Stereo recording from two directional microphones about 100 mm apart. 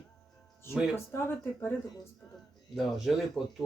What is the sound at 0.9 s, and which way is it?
Speech, 20° left (ahead or behind).